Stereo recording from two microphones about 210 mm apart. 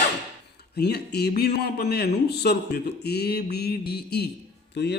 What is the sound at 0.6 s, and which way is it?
A man's voice, 50° left (ahead or behind).